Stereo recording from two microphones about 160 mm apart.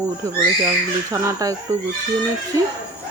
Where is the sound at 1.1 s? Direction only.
20° right (ahead or behind).